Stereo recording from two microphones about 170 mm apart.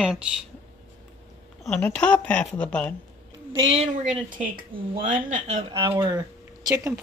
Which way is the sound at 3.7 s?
40° right (ahead or behind).